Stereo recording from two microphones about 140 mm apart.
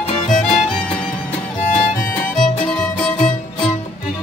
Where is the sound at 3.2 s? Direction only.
50° left (ahead or behind).